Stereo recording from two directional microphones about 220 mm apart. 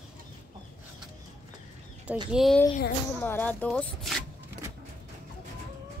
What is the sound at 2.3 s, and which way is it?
A woman's voice, centre (ahead or behind).